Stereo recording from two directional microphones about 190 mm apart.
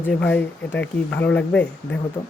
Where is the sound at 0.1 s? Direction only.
5° left (ahead or behind).